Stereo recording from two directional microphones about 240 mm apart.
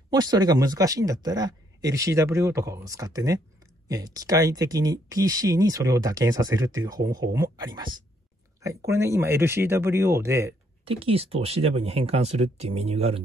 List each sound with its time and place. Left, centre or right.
0.1 s speech: centre
10.9 s speech: right